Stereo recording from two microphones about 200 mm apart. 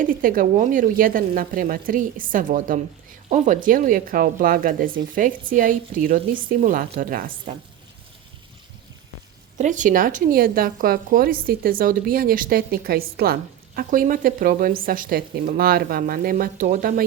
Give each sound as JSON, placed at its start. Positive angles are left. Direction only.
{"t": 0.0, "sound": "speech", "side_deg": -45}
{"t": 9.6, "sound": "speech", "side_deg": -40}